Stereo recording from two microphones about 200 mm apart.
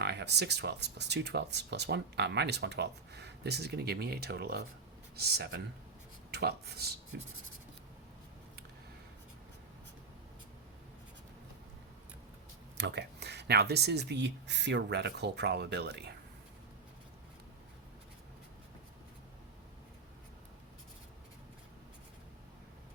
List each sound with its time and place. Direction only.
0.0 s speech: 55° right (ahead or behind)
12.7 s speech: 60° right (ahead or behind)